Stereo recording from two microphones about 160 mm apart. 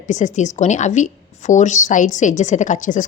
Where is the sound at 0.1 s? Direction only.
50° left (ahead or behind).